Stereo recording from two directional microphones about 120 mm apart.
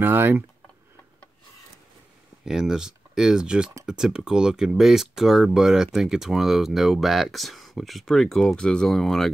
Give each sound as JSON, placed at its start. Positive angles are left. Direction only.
{"t": 0.0, "sound": "speech", "side_deg": -15}
{"t": 2.4, "sound": "speech", "side_deg": -5}